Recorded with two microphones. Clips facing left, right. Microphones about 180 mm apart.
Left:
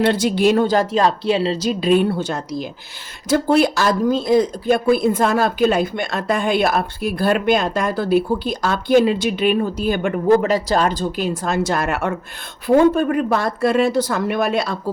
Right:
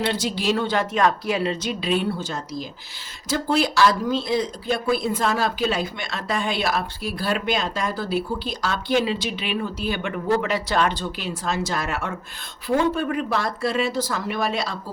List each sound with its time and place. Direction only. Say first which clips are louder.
0.0 s speech: left 8 dB; 55° left (ahead or behind)
3.2 s speech: left 7 dB; 55° left (ahead or behind)